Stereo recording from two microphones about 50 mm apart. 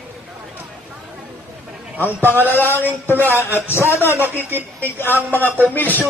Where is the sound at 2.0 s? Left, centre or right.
Left.